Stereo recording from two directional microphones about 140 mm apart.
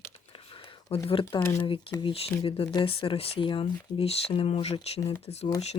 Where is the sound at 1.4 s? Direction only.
15° left (ahead or behind).